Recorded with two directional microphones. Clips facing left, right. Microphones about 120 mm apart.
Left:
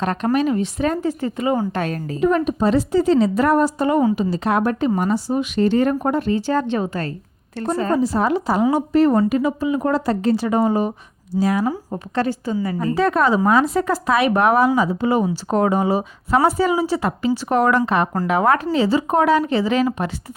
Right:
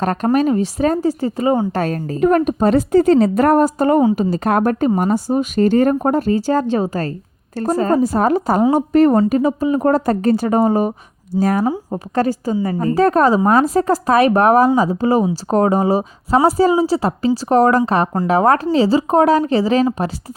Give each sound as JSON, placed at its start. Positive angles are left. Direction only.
{"t": 0.0, "sound": "speech", "side_deg": -40}
{"t": 9.1, "sound": "speech", "side_deg": -35}
{"t": 11.6, "sound": "speech", "side_deg": -25}
{"t": 12.1, "sound": "speech", "side_deg": -40}